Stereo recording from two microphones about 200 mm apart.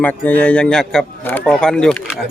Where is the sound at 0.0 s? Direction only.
10° left (ahead or behind).